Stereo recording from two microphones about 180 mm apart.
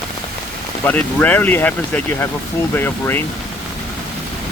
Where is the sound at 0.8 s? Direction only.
10° left (ahead or behind).